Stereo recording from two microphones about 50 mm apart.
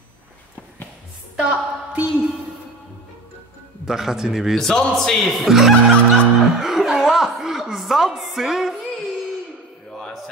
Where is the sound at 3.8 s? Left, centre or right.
Centre.